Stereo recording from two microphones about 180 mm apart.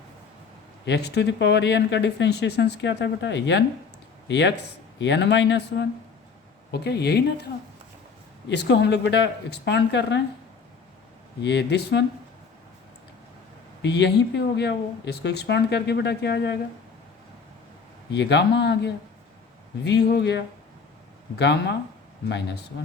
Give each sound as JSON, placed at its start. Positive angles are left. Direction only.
{"t": 0.9, "sound": "speech", "side_deg": 65}
{"t": 8.4, "sound": "speech", "side_deg": 75}
{"t": 11.4, "sound": "speech", "side_deg": 70}
{"t": 13.8, "sound": "speech", "side_deg": 70}
{"t": 18.1, "sound": "speech", "side_deg": 75}